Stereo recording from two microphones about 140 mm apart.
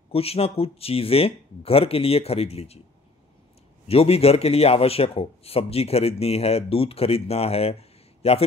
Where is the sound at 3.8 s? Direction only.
45° left (ahead or behind).